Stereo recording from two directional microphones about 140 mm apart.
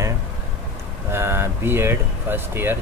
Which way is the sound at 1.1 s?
15° right (ahead or behind).